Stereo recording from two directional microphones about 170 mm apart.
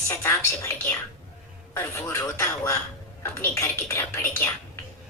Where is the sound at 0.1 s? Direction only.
15° left (ahead or behind).